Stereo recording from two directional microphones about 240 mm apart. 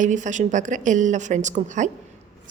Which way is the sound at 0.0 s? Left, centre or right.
Right.